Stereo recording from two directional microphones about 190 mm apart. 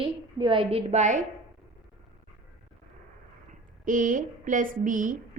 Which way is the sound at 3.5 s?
45° right (ahead or behind).